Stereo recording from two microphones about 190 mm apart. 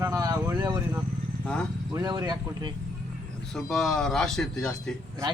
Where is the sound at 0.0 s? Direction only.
15° right (ahead or behind).